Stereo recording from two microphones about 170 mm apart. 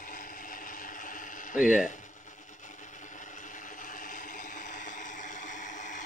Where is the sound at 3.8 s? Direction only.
50° left (ahead or behind).